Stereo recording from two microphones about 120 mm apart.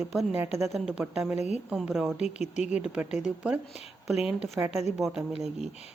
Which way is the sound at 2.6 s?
10° right (ahead or behind).